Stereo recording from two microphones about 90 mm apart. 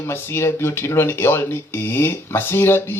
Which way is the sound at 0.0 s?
25° left (ahead or behind).